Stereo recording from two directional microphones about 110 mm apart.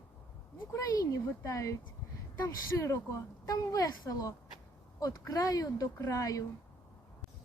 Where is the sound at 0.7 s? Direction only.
30° left (ahead or behind).